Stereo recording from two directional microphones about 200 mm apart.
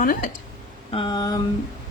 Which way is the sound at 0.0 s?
40° left (ahead or behind).